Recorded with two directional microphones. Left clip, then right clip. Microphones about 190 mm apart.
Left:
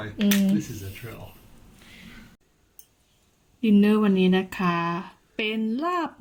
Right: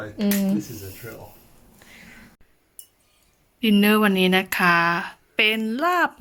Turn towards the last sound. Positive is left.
turn(degrees=-5)  # may be behind; listen again after turning